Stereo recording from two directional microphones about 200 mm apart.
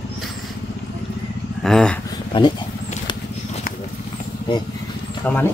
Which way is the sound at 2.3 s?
25° left (ahead or behind).